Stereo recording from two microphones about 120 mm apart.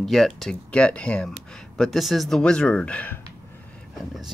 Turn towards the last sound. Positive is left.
turn(degrees=10)  # may be behind; listen again after turning